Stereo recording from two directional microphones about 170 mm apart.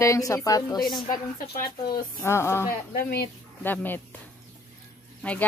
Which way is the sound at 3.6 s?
10° left (ahead or behind).